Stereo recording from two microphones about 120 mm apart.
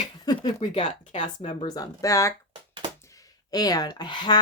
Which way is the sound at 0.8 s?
85° left.